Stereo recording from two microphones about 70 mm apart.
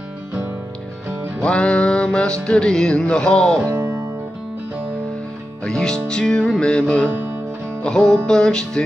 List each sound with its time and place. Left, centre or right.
1.4 s music: centre
3.6 s music: right
5.6 s music: centre